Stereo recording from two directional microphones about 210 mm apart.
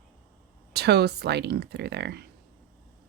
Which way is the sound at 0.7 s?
50° right (ahead or behind).